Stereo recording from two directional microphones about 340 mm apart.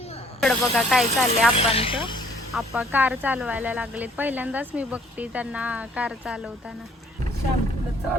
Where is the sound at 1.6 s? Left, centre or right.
Centre.